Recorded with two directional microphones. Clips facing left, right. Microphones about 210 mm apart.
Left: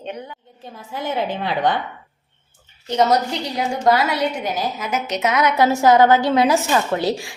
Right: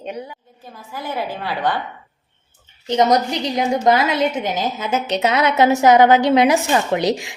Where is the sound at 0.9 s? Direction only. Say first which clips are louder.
Left 2 dB; 25° left (ahead or behind).